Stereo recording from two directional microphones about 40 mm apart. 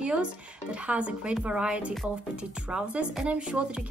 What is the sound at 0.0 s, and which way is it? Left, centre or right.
Speech, right.